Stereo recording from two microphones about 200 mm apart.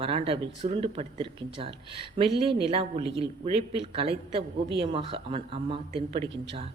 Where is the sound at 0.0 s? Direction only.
30° right (ahead or behind).